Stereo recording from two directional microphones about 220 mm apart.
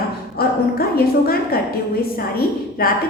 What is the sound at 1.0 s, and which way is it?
Speech, 45° left (ahead or behind).